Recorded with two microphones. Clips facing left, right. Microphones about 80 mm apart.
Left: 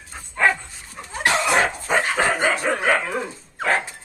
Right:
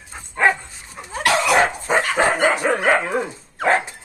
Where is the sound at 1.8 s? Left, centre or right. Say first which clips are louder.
Right 2 dB; centre.